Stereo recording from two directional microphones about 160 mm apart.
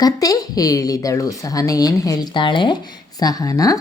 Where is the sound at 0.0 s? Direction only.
20° left (ahead or behind).